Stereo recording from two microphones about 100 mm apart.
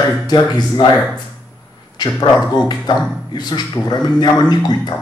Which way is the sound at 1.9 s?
45° left (ahead or behind).